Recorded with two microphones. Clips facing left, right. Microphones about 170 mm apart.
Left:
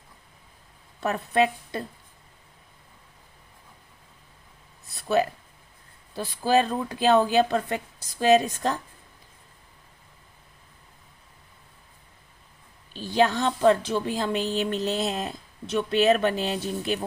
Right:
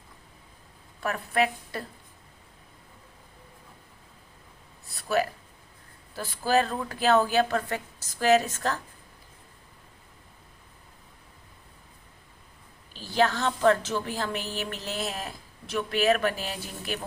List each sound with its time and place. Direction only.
1.0 s speech: 25° left (ahead or behind)
4.9 s a sound: 20° left (ahead or behind)
6.1 s a woman's voice: 20° left (ahead or behind)
13.0 s a woman's voice: 20° left (ahead or behind)